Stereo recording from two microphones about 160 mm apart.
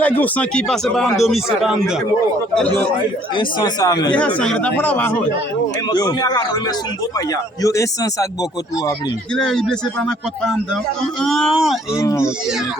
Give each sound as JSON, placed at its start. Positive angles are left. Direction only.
{"t": 0.0, "sound": "speech", "side_deg": 10}
{"t": 3.3, "sound": "speech", "side_deg": 25}
{"t": 4.1, "sound": "speech", "side_deg": 10}
{"t": 5.9, "sound": "speech", "side_deg": 25}
{"t": 7.6, "sound": "speech", "side_deg": 20}
{"t": 9.3, "sound": "speech", "side_deg": 5}
{"t": 11.2, "sound": "speech", "side_deg": 0}
{"t": 11.9, "sound": "speech", "side_deg": 20}